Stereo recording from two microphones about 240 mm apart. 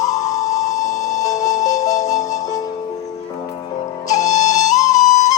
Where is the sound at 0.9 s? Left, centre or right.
Left.